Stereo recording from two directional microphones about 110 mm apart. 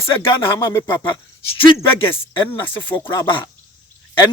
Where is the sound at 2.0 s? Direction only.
55° left (ahead or behind).